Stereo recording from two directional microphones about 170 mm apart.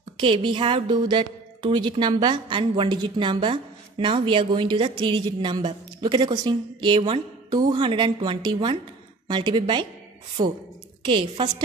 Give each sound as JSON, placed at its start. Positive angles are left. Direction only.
{"t": 0.2, "sound": "a woman's voice", "side_deg": -30}